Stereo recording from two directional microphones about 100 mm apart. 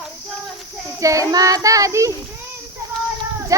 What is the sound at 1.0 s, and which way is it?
Child singing, 35° right (ahead or behind).